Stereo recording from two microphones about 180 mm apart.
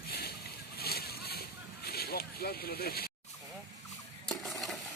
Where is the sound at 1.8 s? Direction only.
60° left (ahead or behind).